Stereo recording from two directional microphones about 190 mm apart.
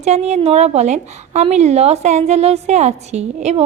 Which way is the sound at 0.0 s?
35° right (ahead or behind).